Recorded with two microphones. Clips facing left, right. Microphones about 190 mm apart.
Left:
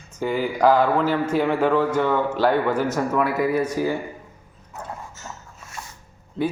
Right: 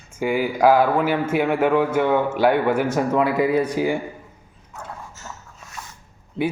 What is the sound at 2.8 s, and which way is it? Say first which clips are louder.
A man's voice: right 2 dB; 25° right (ahead or behind).